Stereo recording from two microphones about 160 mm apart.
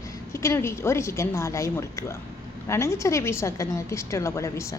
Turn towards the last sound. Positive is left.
turn(degrees=20)  # may be behind; listen again after turning